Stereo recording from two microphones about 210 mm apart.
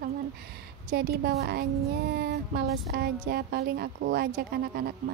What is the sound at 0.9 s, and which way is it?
A woman's voice, 45° right (ahead or behind).